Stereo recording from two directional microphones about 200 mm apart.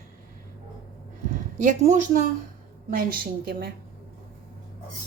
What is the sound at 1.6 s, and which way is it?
A woman's voice, 40° right (ahead or behind).